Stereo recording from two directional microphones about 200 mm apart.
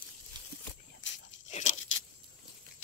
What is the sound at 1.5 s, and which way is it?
Crunch, 35° left (ahead or behind).